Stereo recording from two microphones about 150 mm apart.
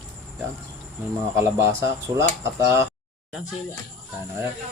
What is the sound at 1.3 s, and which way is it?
Speech, 20° right (ahead or behind).